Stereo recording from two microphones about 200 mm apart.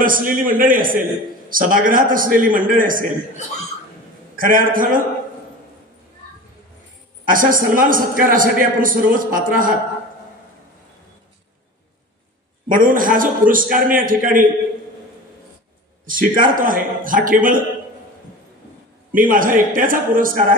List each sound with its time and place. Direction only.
0.0 s a man's voice: 45° right (ahead or behind)
4.4 s a man's voice: 45° right (ahead or behind)
7.2 s a man's voice: 45° right (ahead or behind)
12.6 s a man's voice: 45° right (ahead or behind)
16.1 s a man's voice: 45° right (ahead or behind)
19.1 s a man's voice: 45° right (ahead or behind)